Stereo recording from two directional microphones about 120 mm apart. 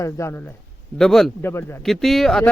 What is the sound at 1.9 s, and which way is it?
Speech, centre (ahead or behind).